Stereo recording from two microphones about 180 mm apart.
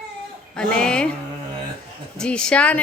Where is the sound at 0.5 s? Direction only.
5° left (ahead or behind).